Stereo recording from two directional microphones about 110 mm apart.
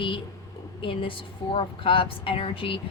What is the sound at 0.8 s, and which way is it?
A woman's voice, 50° left (ahead or behind).